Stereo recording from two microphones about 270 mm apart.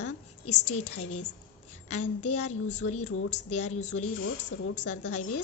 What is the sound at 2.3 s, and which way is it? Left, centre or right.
A woman's voice, left.